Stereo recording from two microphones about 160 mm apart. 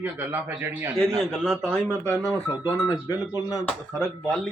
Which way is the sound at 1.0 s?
5° left (ahead or behind).